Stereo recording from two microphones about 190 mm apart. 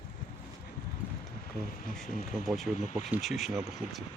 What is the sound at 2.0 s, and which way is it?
Speech, 45° left (ahead or behind).